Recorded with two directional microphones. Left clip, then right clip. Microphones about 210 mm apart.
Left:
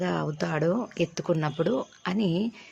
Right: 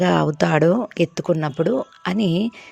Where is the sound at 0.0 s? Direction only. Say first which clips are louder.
Right 11 dB; 40° right (ahead or behind).